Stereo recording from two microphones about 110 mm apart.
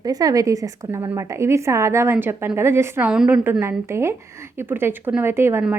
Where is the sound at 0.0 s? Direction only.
35° right (ahead or behind).